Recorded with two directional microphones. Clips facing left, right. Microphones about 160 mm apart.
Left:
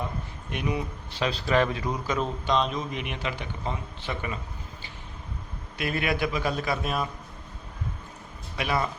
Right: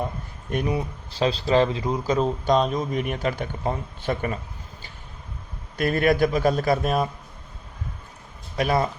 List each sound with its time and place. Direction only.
0.5 s speech: 35° right (ahead or behind)
5.7 s speech: 45° right (ahead or behind)
8.5 s speech: 40° right (ahead or behind)